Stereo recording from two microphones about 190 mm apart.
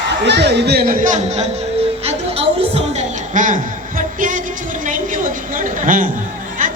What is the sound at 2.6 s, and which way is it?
Music, 35° right (ahead or behind).